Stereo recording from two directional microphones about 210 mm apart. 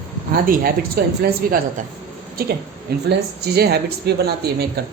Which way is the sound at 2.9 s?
50° right (ahead or behind).